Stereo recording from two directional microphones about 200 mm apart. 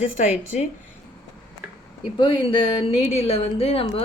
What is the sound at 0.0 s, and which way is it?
Speech, 40° left (ahead or behind).